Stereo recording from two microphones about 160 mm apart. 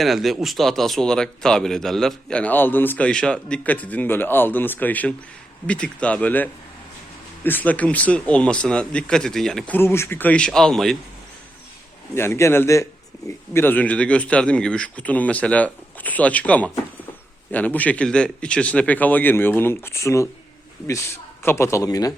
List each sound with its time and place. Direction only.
0.0 s speech: centre (ahead or behind)
12.1 s speech: 15° left (ahead or behind)
21.4 s speech: 15° left (ahead or behind)